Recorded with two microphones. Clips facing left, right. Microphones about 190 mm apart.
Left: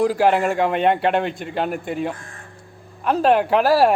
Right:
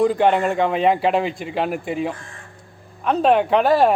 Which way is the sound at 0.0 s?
5° left (ahead or behind).